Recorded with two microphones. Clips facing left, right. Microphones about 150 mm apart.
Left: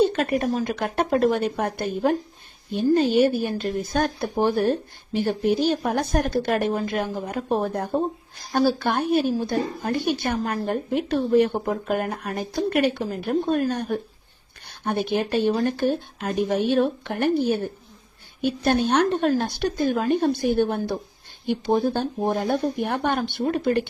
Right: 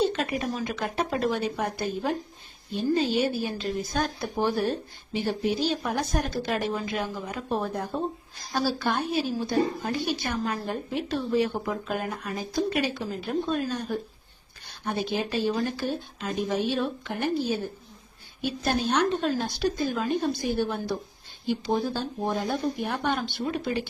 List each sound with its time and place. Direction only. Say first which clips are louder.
0.0 s a woman's voice: left 5 dB; 55° left (ahead or behind)